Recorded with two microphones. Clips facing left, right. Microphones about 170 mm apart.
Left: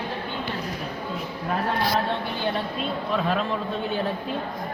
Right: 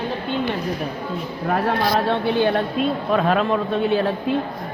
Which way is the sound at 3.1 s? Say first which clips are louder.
Right 6 dB; 60° right (ahead or behind).